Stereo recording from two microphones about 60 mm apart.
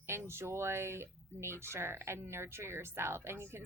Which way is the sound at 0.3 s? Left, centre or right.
Right.